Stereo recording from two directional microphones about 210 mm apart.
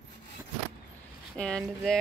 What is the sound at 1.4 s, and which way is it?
Speech, 5° left (ahead or behind).